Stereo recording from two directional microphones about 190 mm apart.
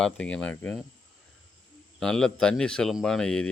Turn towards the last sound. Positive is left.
turn(degrees=5)  # may be behind; listen again after turning